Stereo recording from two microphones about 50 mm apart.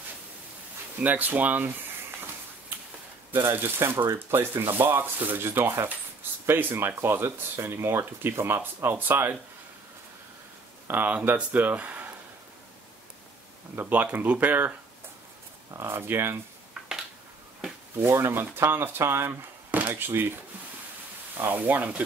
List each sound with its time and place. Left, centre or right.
1.0 s speech: right
3.5 s sanding: right
7.0 s speech: right
8.9 s sanding: right
10.9 s speech: right
13.7 s speech: right
15.8 s sanding: right
18.0 s sanding: right
21.4 s speech: right